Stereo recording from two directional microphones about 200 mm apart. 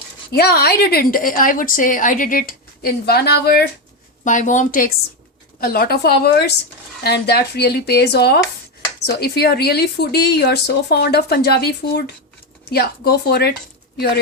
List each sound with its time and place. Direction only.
0.3 s a woman's voice: 50° left (ahead or behind)
4.2 s a woman's voice: 40° left (ahead or behind)